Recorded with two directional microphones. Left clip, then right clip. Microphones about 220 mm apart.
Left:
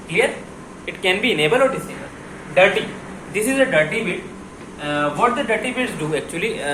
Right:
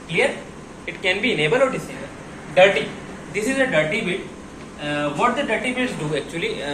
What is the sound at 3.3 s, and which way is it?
Speech, 20° left (ahead or behind).